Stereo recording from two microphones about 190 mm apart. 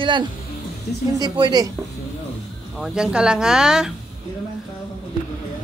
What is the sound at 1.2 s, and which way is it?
Speech, 20° right (ahead or behind).